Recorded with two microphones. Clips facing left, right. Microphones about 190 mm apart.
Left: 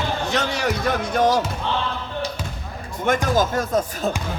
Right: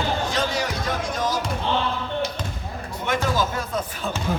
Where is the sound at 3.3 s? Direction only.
45° left (ahead or behind).